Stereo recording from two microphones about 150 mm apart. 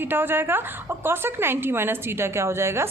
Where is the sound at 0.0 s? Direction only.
15° right (ahead or behind).